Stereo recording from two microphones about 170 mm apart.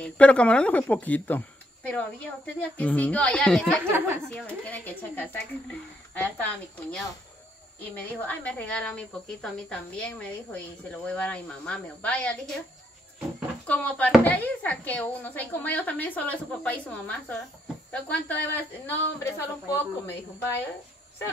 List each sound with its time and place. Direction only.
0.0 s speech: 5° left (ahead or behind)
3.8 s a woman's voice: 15° right (ahead or behind)
4.3 s speech: 5° left (ahead or behind)
13.7 s speech: 10° left (ahead or behind)